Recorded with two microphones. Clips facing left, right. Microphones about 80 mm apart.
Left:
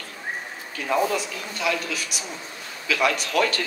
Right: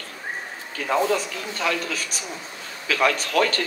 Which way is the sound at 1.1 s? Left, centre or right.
Right.